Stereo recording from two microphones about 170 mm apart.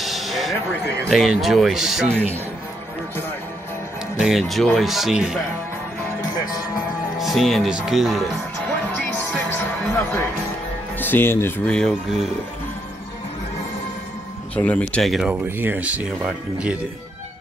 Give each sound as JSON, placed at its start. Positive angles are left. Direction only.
{"t": 0.0, "sound": "a sound", "side_deg": 0}
{"t": 1.0, "sound": "speech", "side_deg": 0}
{"t": 4.2, "sound": "speech", "side_deg": 0}
{"t": 7.2, "sound": "speech", "side_deg": 0}
{"t": 8.9, "sound": "music", "side_deg": 10}
{"t": 11.0, "sound": "speech", "side_deg": 10}
{"t": 14.5, "sound": "speech", "side_deg": 10}